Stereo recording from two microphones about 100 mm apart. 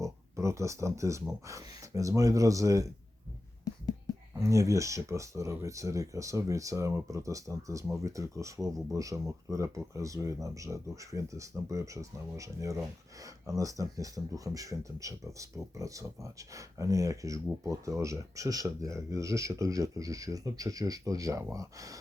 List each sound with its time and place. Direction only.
0.0 s speech: 30° right (ahead or behind)
4.4 s speech: 30° right (ahead or behind)